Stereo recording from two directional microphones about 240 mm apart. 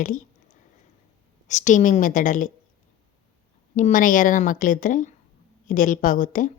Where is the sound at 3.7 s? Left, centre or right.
Left.